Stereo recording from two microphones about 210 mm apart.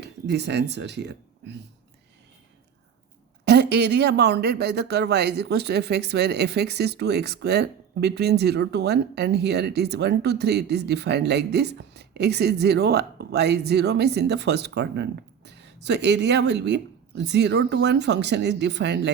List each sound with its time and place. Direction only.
0.0 s speech: 50° right (ahead or behind)
3.4 s speech: 50° right (ahead or behind)